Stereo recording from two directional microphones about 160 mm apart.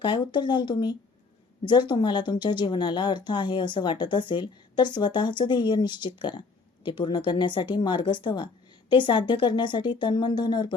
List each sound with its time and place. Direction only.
0.0 s speech: 30° left (ahead or behind)